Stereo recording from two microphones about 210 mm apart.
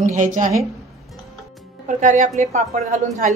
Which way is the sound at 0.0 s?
35° right (ahead or behind).